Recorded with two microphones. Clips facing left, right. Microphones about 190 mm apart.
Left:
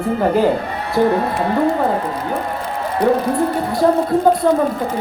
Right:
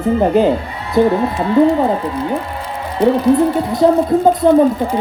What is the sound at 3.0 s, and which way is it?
Speech, 25° right (ahead or behind).